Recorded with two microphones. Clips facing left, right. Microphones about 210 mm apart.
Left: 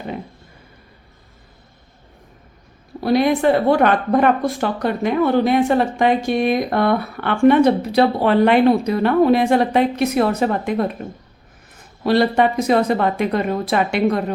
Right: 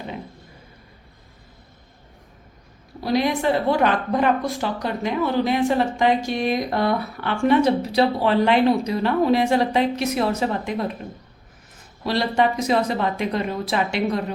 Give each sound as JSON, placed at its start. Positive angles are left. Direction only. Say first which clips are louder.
{"t": 3.0, "sound": "a woman's voice", "louder": "left 5 dB", "side_deg": 55}
{"t": 12.0, "sound": "a woman's voice", "louder": "left 5 dB", "side_deg": 55}